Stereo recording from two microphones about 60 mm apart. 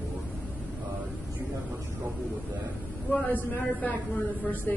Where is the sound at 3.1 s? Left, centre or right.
Left.